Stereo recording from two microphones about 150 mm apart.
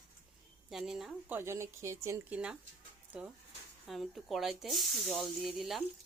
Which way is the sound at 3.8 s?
Centre (ahead or behind).